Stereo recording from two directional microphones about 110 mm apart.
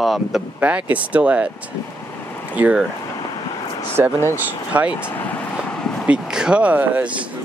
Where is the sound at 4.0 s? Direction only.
15° right (ahead or behind).